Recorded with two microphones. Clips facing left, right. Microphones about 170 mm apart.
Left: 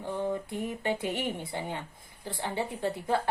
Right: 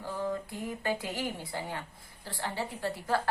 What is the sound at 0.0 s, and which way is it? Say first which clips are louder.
A woman's voice: left 2 dB; 25° left (ahead or behind).